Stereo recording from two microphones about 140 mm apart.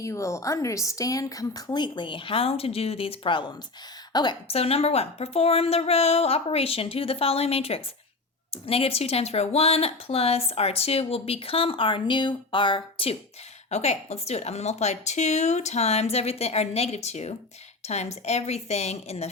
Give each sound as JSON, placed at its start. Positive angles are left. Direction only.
{"t": 0.0, "sound": "a woman's voice", "side_deg": 20}
{"t": 4.4, "sound": "speech", "side_deg": 45}
{"t": 13.7, "sound": "speech", "side_deg": 50}